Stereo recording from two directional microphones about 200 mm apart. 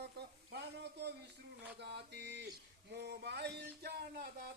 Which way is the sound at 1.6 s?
60° right (ahead or behind).